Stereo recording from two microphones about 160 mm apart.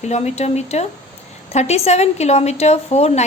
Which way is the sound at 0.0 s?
45° left (ahead or behind).